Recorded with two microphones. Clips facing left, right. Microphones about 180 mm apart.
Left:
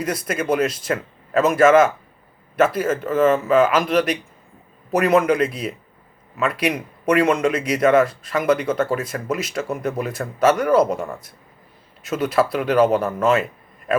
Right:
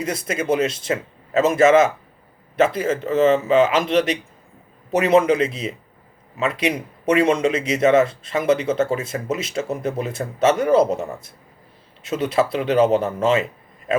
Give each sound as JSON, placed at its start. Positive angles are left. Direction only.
{"t": 0.0, "sound": "speech", "side_deg": -25}